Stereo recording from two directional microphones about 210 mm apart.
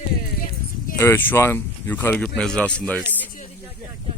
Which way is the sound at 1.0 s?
10° left (ahead or behind).